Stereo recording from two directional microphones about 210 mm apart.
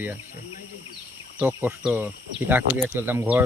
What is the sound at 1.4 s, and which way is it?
Speech, 10° right (ahead or behind).